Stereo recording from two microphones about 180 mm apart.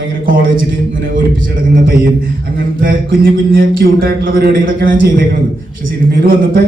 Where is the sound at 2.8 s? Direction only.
50° right (ahead or behind).